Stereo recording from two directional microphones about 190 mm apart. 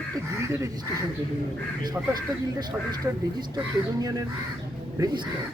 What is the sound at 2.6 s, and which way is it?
Speech, 20° right (ahead or behind).